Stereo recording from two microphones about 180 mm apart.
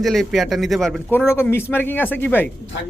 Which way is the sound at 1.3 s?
15° left (ahead or behind).